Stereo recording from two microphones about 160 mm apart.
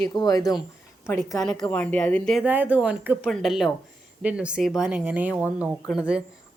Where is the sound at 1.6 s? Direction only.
10° left (ahead or behind).